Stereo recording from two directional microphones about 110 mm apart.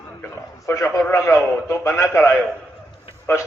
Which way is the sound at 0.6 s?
30° left (ahead or behind).